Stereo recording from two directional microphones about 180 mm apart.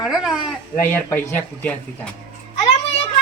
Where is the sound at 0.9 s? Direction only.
10° left (ahead or behind).